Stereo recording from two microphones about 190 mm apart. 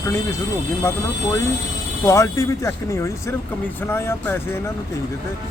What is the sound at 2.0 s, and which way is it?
Speech, 15° left (ahead or behind).